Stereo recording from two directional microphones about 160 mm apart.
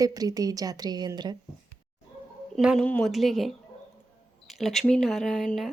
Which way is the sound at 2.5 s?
Centre (ahead or behind).